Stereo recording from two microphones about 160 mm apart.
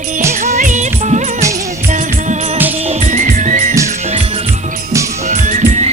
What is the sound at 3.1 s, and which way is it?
Music, 50° right (ahead or behind).